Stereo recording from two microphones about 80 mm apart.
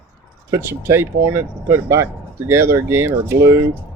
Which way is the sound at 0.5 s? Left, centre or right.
Right.